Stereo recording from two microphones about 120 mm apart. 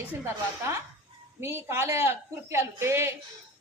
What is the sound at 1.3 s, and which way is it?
A woman's voice, 20° right (ahead or behind).